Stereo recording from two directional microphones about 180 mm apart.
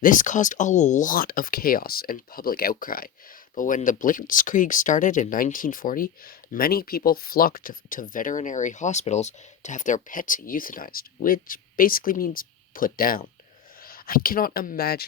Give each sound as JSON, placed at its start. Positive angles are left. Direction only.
{"t": 0.0, "sound": "speech", "side_deg": 45}